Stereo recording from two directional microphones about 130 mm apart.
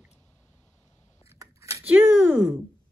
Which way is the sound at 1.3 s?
25° right (ahead or behind).